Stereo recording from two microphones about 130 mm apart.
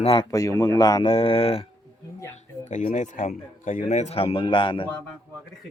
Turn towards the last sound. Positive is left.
turn(degrees=40)  # may be behind; listen again after turning